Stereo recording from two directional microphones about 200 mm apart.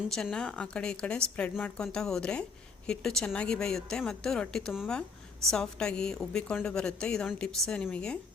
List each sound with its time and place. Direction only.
0.1 s a woman's voice: 5° left (ahead or behind)